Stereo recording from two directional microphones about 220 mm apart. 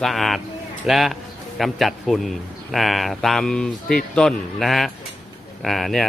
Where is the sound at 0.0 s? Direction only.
Centre (ahead or behind).